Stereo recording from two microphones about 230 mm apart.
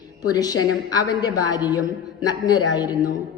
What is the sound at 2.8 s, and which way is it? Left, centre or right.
Speech, centre.